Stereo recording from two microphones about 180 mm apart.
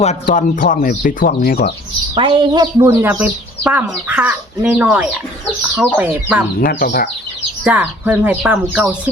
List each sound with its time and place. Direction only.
0.3 s speech: 50° left (ahead or behind)
2.1 s speech: 25° right (ahead or behind); by 6.4 s 10° right (ahead or behind)
6.6 s speech: 55° left (ahead or behind)
7.6 s speech: 10° right (ahead or behind)